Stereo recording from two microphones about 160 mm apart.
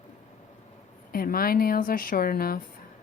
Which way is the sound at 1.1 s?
65° left (ahead or behind).